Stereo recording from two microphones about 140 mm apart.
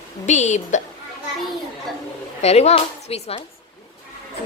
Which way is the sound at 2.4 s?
50° left (ahead or behind).